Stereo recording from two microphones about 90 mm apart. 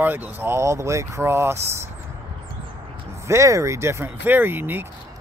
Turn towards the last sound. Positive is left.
turn(degrees=-20)  # may be behind; listen again after turning